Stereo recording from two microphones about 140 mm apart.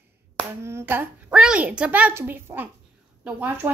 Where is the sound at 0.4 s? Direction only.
15° right (ahead or behind).